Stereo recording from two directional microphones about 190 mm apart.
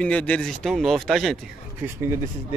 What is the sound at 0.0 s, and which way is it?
Speech, 5° left (ahead or behind).